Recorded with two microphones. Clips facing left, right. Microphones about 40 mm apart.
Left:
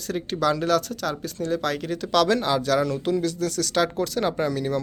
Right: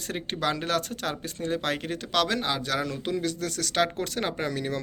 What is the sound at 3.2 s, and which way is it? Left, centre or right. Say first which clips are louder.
Speech: left 5 dB; right.